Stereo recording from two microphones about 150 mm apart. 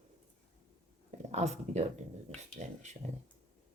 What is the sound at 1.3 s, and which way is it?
Speech, 45° right (ahead or behind).